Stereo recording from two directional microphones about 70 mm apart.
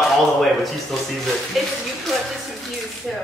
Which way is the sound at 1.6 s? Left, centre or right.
Centre.